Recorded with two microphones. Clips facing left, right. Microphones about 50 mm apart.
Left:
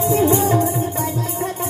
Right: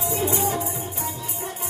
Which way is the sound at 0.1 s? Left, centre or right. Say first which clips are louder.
Left 8 dB; left.